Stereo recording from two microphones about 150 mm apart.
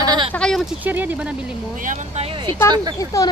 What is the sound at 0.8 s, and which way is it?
Speech, 10° right (ahead or behind).